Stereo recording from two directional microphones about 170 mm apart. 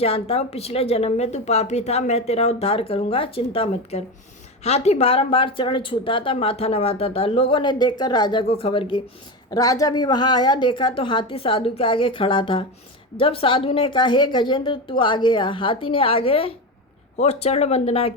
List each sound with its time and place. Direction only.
0.0 s a woman's voice: 35° left (ahead or behind)
9.5 s a woman's voice: 20° left (ahead or behind)